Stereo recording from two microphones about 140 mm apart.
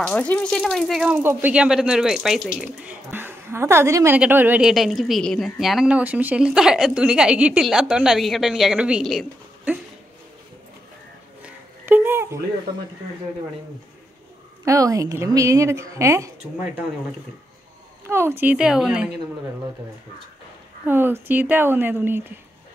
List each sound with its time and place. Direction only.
0.0 s a woman's voice: 10° left (ahead or behind)
1.2 s a woman's voice: 15° right (ahead or behind)
11.4 s a sound: 15° right (ahead or behind)
14.6 s a woman's voice: 25° right (ahead or behind)
18.0 s speech: 15° right (ahead or behind)
20.8 s speech: 15° right (ahead or behind)